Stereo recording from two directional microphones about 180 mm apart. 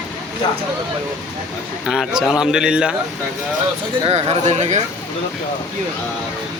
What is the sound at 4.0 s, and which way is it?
Speech, 35° right (ahead or behind).